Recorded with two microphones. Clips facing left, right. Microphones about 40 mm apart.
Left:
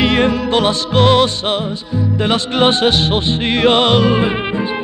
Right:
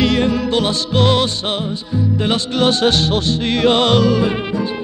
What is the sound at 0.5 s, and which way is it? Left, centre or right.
Music, left.